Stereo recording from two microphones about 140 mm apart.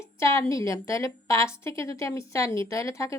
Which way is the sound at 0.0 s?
20° left (ahead or behind).